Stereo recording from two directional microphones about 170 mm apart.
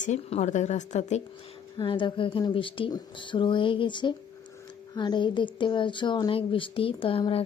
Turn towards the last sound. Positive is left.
turn(degrees=30)  # may be behind; listen again after turning